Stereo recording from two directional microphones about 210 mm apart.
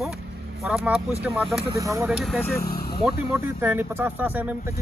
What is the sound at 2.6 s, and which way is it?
Vehicle, 45° left (ahead or behind).